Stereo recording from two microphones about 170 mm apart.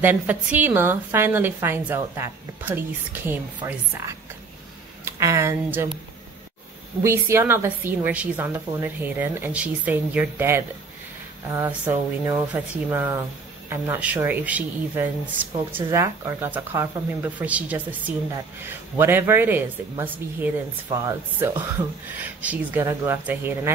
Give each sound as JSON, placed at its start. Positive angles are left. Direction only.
{"t": 0.0, "sound": "a man's voice", "side_deg": -10}
{"t": 5.0, "sound": "speech", "side_deg": -15}
{"t": 7.0, "sound": "a man's voice", "side_deg": -15}